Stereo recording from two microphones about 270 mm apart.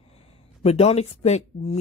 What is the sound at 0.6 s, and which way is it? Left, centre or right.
Speech, left.